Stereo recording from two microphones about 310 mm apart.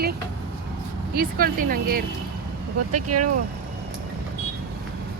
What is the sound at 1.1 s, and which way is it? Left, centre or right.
Speech, right.